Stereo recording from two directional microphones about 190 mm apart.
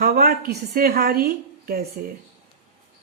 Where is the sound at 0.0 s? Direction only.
50° right (ahead or behind).